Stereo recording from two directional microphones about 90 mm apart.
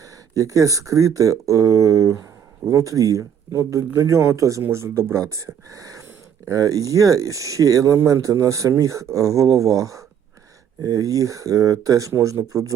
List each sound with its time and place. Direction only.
0.3 s speech: 40° right (ahead or behind)